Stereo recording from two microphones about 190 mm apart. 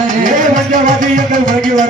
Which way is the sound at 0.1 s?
45° right (ahead or behind).